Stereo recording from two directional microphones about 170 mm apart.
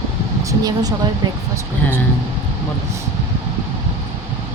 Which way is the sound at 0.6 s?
20° right (ahead or behind).